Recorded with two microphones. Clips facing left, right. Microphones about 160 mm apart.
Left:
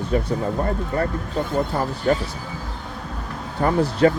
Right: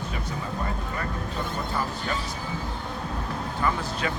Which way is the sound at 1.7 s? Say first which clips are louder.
Left 9 dB; 45° left (ahead or behind).